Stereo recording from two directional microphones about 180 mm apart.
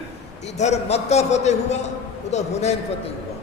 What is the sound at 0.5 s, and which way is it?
A man's voice, 40° left (ahead or behind).